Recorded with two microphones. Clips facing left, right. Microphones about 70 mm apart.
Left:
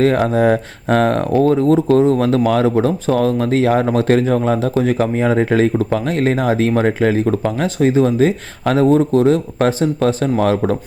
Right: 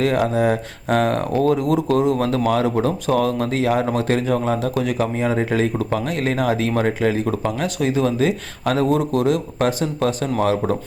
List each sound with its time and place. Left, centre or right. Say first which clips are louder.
0.0 s speech: left 4 dB; left